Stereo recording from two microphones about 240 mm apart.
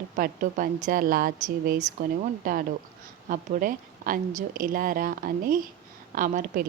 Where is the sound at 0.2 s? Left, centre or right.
Right.